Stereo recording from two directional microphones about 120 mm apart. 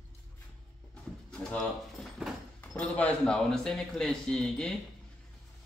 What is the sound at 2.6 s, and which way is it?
A man's voice, 10° left (ahead or behind).